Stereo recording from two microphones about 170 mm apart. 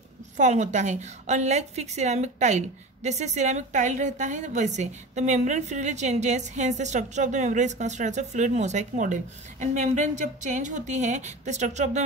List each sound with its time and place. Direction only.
0.4 s a woman's voice: 45° right (ahead or behind)